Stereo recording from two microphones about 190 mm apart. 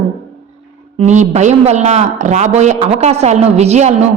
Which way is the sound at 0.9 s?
40° right (ahead or behind).